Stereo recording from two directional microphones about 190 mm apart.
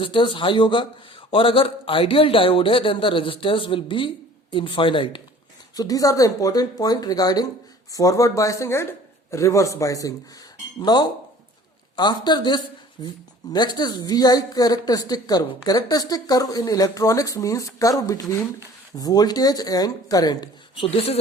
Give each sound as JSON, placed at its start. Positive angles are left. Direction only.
{"t": 0.0, "sound": "speech", "side_deg": 25}